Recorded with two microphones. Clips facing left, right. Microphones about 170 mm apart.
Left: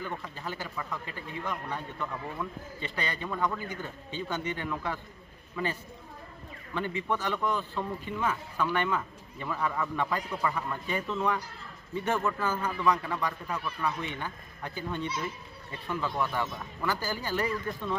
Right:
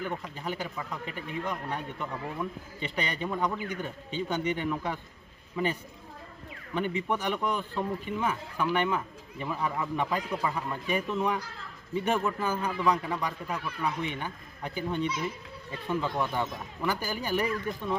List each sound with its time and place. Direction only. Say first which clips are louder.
0.0 s speech: right 3 dB; 15° right (ahead or behind)
6.7 s speech: right 2 dB; 15° right (ahead or behind)